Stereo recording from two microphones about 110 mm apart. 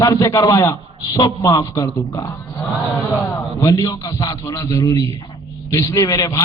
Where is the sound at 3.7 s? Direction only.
35° left (ahead or behind).